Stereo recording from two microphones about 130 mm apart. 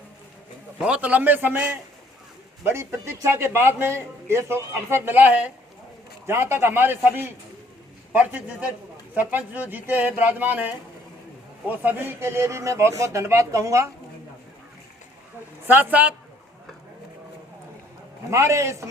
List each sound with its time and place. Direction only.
0.8 s a man's voice: 10° right (ahead or behind)
15.6 s speech: 15° right (ahead or behind)
18.3 s a man's voice: 20° right (ahead or behind)